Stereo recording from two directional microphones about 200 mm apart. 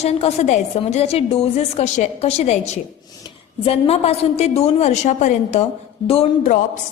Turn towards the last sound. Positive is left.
turn(degrees=35)  # may be behind; listen again after turning